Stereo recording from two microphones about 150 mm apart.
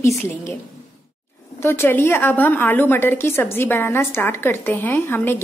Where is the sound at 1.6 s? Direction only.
15° left (ahead or behind).